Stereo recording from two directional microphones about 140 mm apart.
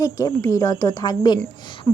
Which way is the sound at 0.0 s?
25° left (ahead or behind).